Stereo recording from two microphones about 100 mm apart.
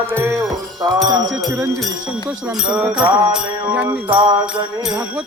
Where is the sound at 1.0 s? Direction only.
40° right (ahead or behind).